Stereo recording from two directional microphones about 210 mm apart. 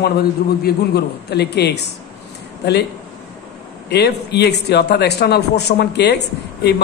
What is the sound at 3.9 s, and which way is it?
Speech, 50° left (ahead or behind).